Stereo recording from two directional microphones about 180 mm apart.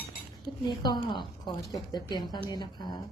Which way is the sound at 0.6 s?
25° left (ahead or behind).